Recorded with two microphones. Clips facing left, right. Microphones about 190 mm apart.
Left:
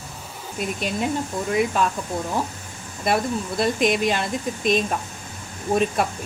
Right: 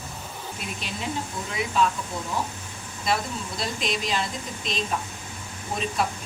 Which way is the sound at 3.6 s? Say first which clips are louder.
Left 10 dB; 55° left (ahead or behind).